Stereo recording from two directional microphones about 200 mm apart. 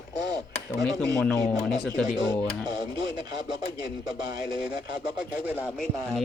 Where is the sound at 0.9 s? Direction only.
15° right (ahead or behind).